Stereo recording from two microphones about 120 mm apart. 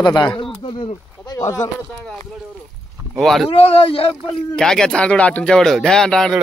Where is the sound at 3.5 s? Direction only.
50° left (ahead or behind).